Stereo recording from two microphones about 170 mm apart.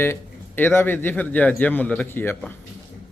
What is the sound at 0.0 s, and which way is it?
Speech, 10° left (ahead or behind).